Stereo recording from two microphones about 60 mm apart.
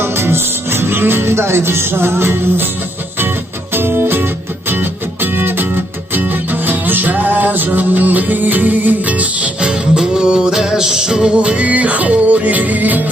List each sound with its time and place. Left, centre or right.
0.0 s music: right
3.8 s music: right; by 11.3 s centre
11.3 s music: right